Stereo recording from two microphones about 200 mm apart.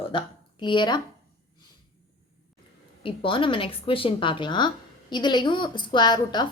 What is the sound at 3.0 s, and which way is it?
Speech, 25° left (ahead or behind).